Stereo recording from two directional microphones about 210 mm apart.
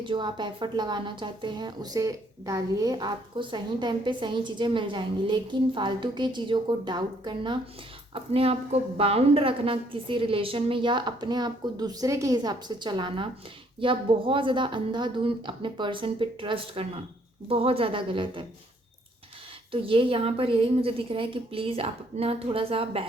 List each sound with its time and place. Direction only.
0.0 s a woman's voice: 20° right (ahead or behind)
19.7 s a woman's voice: 25° right (ahead or behind)